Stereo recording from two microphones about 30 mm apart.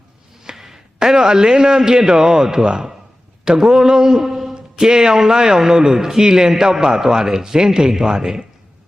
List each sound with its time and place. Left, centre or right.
0.5 s a man's voice: centre
4.2 s a sound: centre
4.5 s a man's voice: right